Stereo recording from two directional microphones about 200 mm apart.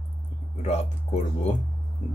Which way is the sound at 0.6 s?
35° left (ahead or behind).